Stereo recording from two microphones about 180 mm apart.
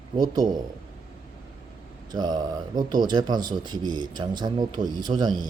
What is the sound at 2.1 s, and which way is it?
Speech, 25° right (ahead or behind).